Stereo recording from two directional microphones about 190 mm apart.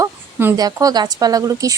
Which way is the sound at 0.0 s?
15° right (ahead or behind).